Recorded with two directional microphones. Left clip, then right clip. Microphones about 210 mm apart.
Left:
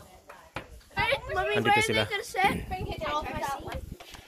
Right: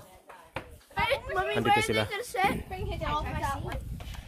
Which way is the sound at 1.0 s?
40° right (ahead or behind).